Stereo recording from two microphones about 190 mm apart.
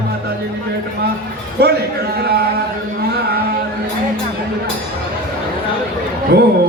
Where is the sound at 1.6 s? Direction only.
55° right (ahead or behind).